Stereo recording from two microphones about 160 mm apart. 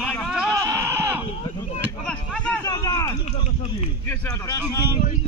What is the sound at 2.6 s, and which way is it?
Speech, 25° left (ahead or behind).